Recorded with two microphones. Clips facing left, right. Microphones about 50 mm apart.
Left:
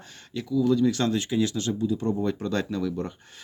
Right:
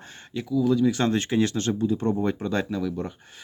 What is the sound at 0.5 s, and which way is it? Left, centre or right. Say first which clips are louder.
Speech: even; centre.